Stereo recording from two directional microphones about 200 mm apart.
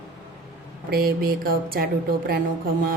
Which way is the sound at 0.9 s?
50° right (ahead or behind).